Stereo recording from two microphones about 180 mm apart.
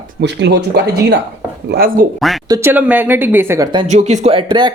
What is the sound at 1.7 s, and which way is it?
Speech, 55° right (ahead or behind).